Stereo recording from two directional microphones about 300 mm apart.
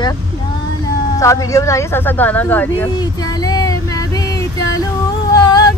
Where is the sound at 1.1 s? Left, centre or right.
Centre.